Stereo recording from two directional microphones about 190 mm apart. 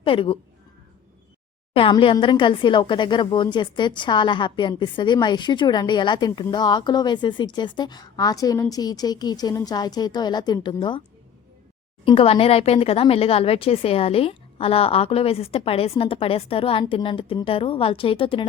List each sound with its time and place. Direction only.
0.0 s speech: 30° left (ahead or behind)
1.7 s speech: 30° left (ahead or behind)
12.0 s speech: 30° left (ahead or behind)